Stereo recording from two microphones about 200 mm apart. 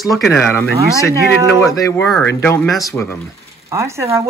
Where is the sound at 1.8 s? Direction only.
5° left (ahead or behind).